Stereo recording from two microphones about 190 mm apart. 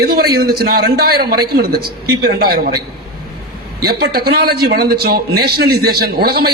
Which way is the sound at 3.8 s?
55° right (ahead or behind).